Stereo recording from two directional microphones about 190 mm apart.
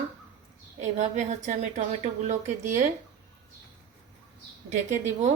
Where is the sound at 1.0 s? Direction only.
40° right (ahead or behind).